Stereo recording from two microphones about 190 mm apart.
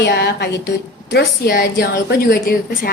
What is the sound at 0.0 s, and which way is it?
A woman's voice, 65° left (ahead or behind).